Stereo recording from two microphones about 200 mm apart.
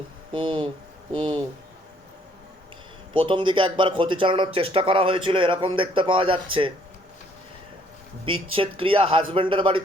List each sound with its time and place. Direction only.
0.3 s speech: 25° right (ahead or behind)
3.1 s speech: 25° right (ahead or behind)
8.5 s speech: 25° right (ahead or behind)